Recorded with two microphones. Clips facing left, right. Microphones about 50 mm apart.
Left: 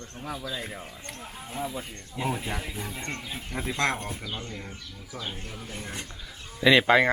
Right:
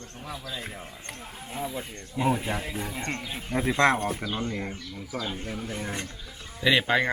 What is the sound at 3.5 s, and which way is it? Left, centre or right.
Speech, centre.